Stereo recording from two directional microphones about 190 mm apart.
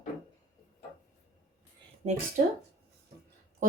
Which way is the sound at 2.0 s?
35° right (ahead or behind).